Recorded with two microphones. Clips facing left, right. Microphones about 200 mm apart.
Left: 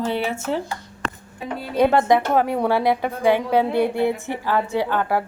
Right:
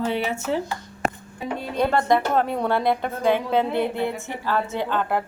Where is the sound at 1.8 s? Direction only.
20° left (ahead or behind).